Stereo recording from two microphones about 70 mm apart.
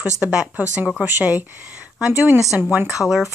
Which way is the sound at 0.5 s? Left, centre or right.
Right.